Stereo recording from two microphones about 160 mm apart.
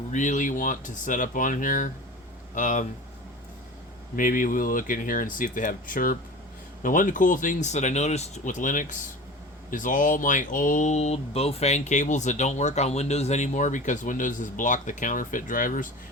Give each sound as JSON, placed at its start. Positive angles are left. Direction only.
{"t": 0.1, "sound": "speech", "side_deg": 50}
{"t": 4.1, "sound": "speech", "side_deg": 60}